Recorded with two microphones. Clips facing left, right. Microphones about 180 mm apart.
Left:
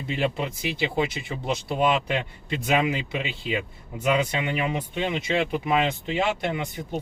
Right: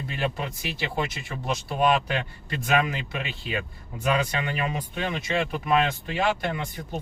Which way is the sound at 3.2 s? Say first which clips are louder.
Left 3 dB; 15° left (ahead or behind).